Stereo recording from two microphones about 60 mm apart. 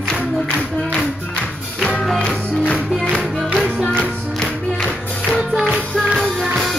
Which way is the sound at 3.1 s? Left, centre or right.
Centre.